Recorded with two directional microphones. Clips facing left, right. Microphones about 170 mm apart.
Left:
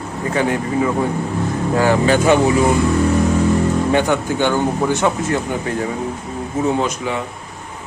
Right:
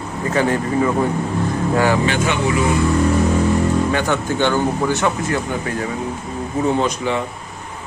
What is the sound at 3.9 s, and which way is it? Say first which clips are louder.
Speech: left 3 dB; 15° left (ahead or behind).